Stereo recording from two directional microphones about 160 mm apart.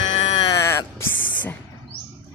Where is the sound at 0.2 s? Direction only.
35° left (ahead or behind).